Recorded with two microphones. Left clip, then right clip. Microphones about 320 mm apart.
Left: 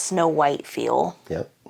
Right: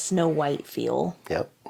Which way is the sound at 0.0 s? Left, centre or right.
Left.